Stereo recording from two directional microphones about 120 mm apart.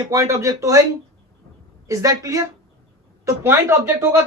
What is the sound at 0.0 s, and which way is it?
Speech, 30° right (ahead or behind).